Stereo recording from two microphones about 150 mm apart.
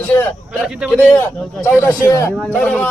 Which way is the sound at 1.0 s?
10° left (ahead or behind).